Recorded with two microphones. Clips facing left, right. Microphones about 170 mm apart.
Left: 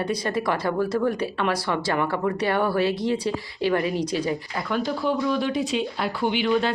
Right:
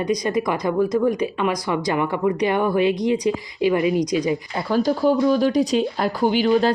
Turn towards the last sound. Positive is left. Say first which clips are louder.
# right 5 dB
turn(degrees=-40)  # may be behind; listen again after turning